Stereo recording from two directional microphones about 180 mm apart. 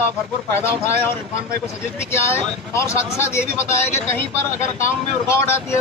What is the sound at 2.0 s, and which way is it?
A man's voice, 15° left (ahead or behind).